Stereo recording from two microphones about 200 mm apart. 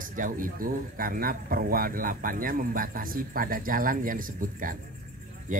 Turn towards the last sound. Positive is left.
turn(degrees=-40)  # may be behind; listen again after turning